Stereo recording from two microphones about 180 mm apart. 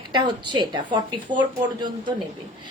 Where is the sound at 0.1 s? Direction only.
25° right (ahead or behind).